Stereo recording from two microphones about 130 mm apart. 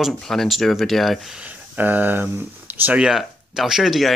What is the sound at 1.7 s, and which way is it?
Speech, 15° right (ahead or behind).